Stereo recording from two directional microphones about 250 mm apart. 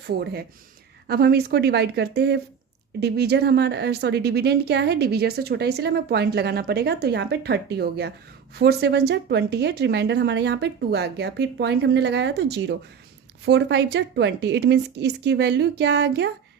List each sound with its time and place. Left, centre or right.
0.2 s a woman's voice: right